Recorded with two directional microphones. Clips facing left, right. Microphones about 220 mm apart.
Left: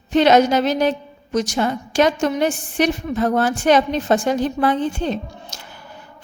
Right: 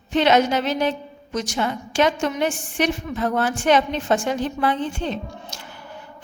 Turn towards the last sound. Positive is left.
turn(degrees=40)  # may be behind; listen again after turning